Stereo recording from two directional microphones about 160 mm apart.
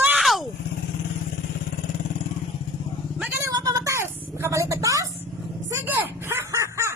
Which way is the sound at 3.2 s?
15° right (ahead or behind).